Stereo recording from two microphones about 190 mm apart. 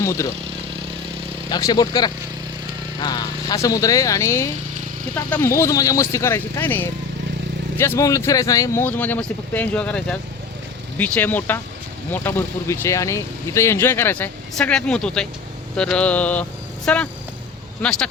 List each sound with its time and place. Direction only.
0.0 s speech: 15° left (ahead or behind)
1.5 s speech: 20° left (ahead or behind)